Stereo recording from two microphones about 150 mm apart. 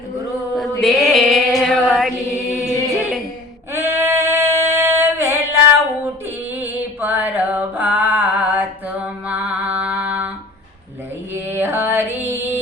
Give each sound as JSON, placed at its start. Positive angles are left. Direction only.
{"t": 0.8, "sound": "female singing", "side_deg": 0}
{"t": 2.3, "sound": "a capella", "side_deg": 0}
{"t": 3.7, "sound": "female singing", "side_deg": -15}
{"t": 6.2, "sound": "music", "side_deg": -15}
{"t": 11.4, "sound": "music", "side_deg": -15}